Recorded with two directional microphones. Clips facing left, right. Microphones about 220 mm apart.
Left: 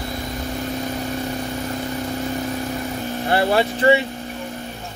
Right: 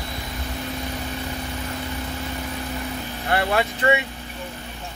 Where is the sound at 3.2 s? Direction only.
30° left (ahead or behind).